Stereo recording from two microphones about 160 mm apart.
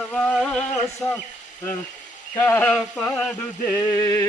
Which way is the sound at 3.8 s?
20° left (ahead or behind).